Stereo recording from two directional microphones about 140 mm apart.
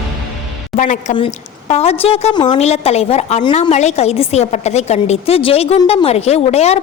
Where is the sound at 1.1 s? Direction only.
45° left (ahead or behind).